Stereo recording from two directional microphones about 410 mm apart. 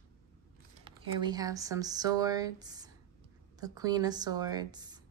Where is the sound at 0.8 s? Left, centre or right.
Centre.